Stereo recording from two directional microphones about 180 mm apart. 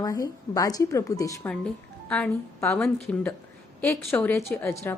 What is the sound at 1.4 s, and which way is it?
A woman's voice, 5° left (ahead or behind).